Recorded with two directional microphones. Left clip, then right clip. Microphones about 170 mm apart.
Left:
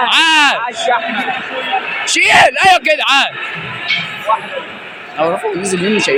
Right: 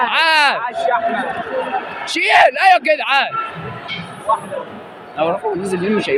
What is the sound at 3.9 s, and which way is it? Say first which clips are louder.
Music: left 13 dB; 65° right (ahead or behind).